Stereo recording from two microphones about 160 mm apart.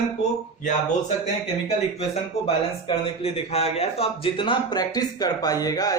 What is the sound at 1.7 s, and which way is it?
Speech, 40° left (ahead or behind).